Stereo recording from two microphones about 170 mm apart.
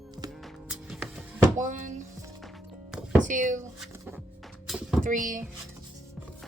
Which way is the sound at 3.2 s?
50° right (ahead or behind).